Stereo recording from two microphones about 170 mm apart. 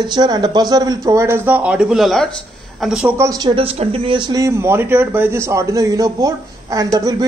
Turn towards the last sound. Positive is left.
turn(degrees=-20)  # may be behind; listen again after turning